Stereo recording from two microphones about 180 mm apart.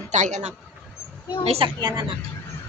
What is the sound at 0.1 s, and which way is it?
Child singing, 40° right (ahead or behind).